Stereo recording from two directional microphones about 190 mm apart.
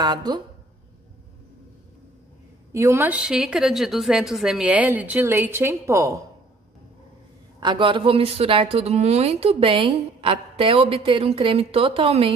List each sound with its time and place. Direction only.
0.0 s a woman's voice: 20° right (ahead or behind)
2.7 s a woman's voice: 15° right (ahead or behind)
7.6 s a woman's voice: 25° right (ahead or behind)